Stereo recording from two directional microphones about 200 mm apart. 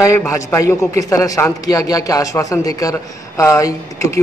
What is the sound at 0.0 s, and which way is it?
A man's voice, 15° left (ahead or behind).